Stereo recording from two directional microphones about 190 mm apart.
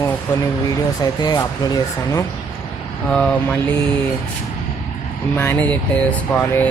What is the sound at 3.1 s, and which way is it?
Music, 5° left (ahead or behind).